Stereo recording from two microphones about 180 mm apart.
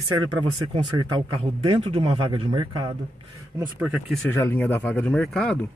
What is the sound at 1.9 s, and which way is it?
A man's voice, 25° right (ahead or behind).